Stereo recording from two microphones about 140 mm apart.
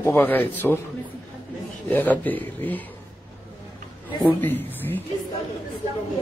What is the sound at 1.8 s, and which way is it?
Speech, 10° left (ahead or behind).